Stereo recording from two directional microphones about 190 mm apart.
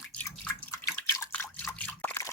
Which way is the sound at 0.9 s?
15° left (ahead or behind).